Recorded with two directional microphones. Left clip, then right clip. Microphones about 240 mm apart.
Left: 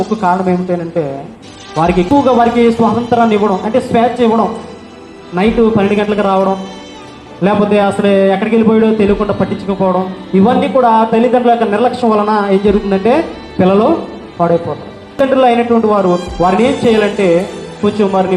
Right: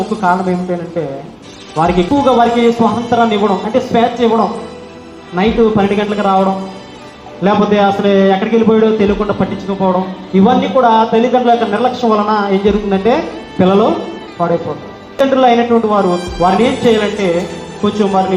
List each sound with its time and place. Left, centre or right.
0.2 s a man's voice: left
15.4 s a man's voice: left